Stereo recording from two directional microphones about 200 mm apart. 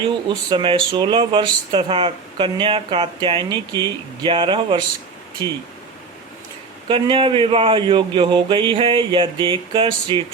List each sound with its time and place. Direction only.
0.3 s speech: 25° right (ahead or behind)
6.8 s speech: 25° right (ahead or behind)